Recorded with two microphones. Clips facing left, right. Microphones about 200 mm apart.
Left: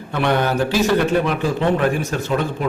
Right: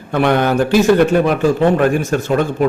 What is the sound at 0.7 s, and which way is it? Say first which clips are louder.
Speech: right 7 dB; 50° right (ahead or behind).